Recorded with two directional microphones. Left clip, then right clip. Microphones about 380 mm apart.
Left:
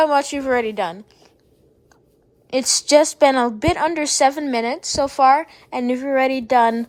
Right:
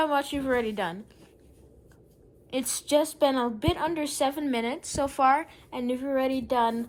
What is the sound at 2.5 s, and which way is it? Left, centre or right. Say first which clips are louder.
Speech: left 11 dB; centre.